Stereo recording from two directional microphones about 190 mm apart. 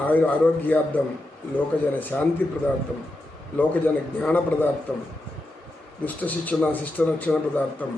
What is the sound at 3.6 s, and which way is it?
A man's voice, 10° left (ahead or behind).